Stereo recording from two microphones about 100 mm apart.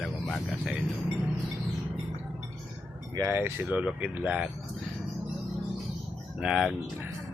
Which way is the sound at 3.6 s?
10° right (ahead or behind).